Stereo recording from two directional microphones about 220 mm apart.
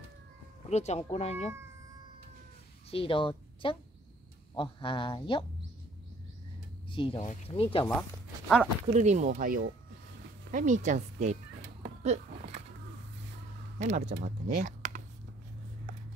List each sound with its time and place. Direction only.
0.7 s speech: 30° left (ahead or behind)
2.9 s a woman's voice: 25° left (ahead or behind)
6.9 s speech: 25° left (ahead or behind)
8.8 s speech: 30° right (ahead or behind)
11.8 s a sound: 30° right (ahead or behind)
13.7 s speech: 30° right (ahead or behind)
14.5 s computer keyboard: 35° right (ahead or behind)